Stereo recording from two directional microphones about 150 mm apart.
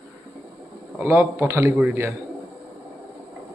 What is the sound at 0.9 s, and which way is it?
A man's voice, 15° right (ahead or behind).